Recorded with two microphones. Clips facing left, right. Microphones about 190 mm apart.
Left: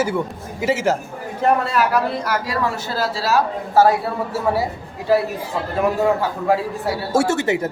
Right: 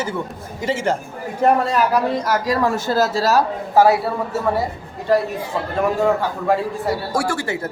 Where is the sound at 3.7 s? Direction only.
15° right (ahead or behind).